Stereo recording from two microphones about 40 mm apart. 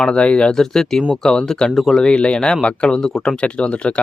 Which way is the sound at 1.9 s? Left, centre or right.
Left.